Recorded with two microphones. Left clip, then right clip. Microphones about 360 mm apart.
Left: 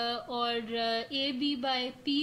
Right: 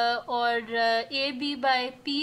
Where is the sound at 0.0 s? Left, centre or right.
Centre.